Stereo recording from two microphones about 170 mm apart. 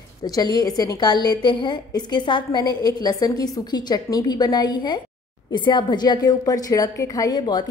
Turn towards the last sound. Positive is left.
turn(degrees=25)  # may be behind; listen again after turning